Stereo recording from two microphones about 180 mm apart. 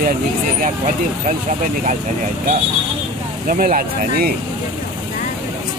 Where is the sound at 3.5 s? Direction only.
50° right (ahead or behind).